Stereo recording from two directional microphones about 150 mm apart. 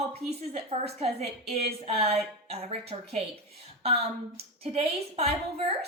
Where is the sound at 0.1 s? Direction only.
45° right (ahead or behind).